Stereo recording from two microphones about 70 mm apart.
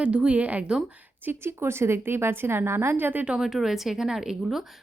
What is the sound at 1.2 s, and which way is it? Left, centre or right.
Speech, right.